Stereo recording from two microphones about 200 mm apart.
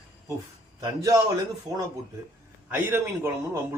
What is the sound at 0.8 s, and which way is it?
Speech, 15° right (ahead or behind).